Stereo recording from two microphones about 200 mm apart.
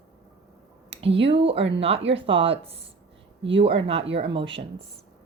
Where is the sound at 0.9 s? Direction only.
30° right (ahead or behind).